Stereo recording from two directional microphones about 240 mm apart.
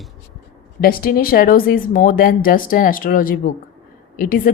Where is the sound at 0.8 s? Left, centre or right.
Left.